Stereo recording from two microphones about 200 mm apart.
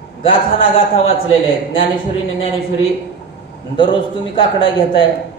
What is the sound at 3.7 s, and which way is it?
A man's voice, 25° left (ahead or behind).